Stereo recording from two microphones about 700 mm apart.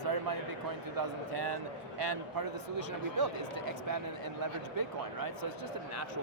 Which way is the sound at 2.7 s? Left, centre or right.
Right.